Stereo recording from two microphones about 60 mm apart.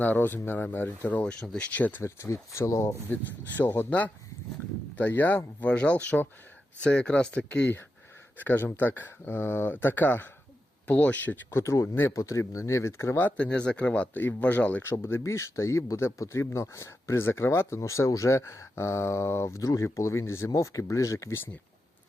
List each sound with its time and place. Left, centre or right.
0.0 s speech: left
1.2 s speech: centre
1.7 s speech: left
2.0 s speech: left
3.8 s speech: left
8.4 s speech: left
11.5 s speech: left
13.1 s speech: left
15.2 s speech: left
17.7 s speech: left